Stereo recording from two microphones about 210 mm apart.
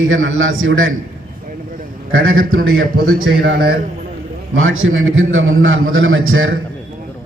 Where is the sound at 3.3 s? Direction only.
45° right (ahead or behind).